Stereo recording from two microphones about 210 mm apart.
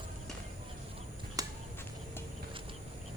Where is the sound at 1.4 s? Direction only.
15° right (ahead or behind).